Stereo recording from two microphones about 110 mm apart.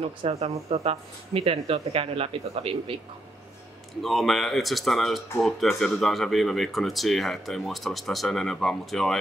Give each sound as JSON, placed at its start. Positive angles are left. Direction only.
{"t": 0.0, "sound": "speech", "side_deg": -65}
{"t": 4.0, "sound": "speech", "side_deg": 0}